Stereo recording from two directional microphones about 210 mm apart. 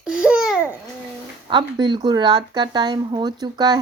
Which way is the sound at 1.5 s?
20° right (ahead or behind).